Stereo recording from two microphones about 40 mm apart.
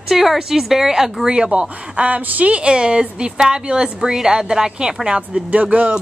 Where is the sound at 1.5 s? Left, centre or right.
Right.